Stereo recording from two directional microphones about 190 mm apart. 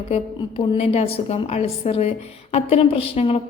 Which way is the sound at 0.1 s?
30° left (ahead or behind).